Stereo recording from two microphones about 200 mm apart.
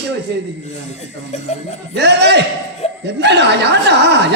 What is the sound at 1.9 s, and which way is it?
A woman's voice, 60° right (ahead or behind).